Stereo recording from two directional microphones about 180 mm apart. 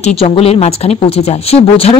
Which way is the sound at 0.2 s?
35° left (ahead or behind).